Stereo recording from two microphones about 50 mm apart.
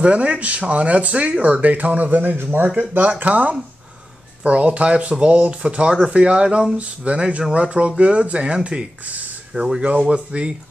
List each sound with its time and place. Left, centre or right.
0.0 s speech: right
3.1 s speech: right; by 9.8 s centre
9.8 s speech: right